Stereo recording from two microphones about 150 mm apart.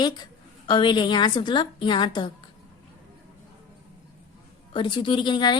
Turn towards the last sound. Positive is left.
turn(degrees=30)  # may be behind; listen again after turning